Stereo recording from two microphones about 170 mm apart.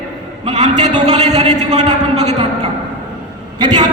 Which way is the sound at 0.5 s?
45° right (ahead or behind).